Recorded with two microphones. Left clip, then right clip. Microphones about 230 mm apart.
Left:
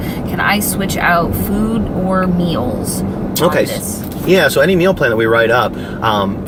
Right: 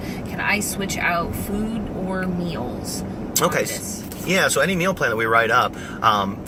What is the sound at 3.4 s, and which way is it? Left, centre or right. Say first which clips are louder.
Speech: left 8 dB; centre.